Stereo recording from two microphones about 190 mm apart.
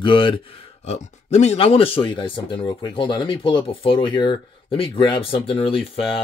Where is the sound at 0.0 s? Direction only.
25° left (ahead or behind).